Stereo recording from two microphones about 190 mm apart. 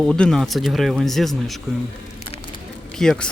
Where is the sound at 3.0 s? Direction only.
5° left (ahead or behind).